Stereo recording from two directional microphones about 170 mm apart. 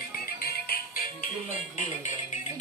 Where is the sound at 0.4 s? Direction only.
65° left (ahead or behind).